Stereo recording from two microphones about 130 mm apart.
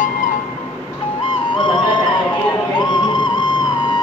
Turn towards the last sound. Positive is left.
turn(degrees=35)  # may be behind; listen again after turning